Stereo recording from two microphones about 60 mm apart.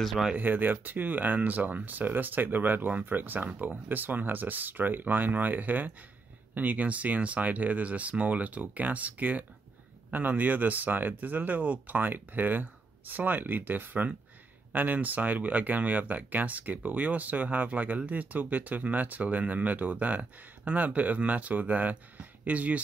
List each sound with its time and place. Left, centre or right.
0.0 s speech: centre
0.3 s speech: right